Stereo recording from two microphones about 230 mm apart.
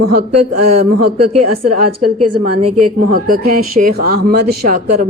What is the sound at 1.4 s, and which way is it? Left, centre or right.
A woman's voice, right.